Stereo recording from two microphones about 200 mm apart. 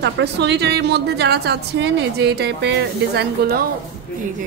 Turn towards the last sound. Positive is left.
turn(degrees=-50)  # may be behind; listen again after turning